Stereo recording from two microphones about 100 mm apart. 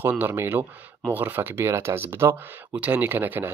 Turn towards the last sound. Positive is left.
turn(degrees=-20)  # may be behind; listen again after turning